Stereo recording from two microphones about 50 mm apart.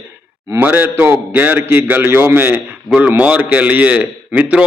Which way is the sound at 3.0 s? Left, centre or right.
Right.